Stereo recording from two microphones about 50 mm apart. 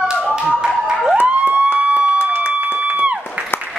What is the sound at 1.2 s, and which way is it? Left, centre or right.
Police car, right.